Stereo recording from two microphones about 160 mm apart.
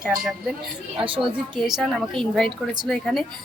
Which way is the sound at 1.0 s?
30° right (ahead or behind).